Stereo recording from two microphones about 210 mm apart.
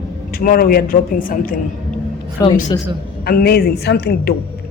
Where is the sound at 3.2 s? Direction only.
45° left (ahead or behind).